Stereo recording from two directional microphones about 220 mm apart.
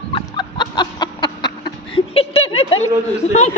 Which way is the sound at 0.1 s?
20° left (ahead or behind).